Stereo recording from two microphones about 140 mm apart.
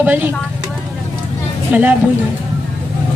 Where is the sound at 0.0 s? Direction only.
15° right (ahead or behind).